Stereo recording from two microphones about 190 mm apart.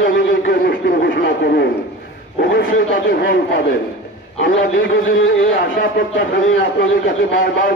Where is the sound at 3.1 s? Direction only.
55° left (ahead or behind).